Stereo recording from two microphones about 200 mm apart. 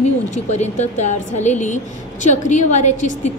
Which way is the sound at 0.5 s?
35° left (ahead or behind).